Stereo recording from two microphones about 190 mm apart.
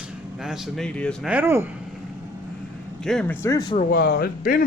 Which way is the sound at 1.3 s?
10° right (ahead or behind).